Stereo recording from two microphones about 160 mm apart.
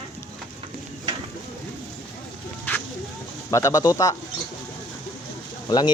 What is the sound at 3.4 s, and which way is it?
Speech, 20° left (ahead or behind).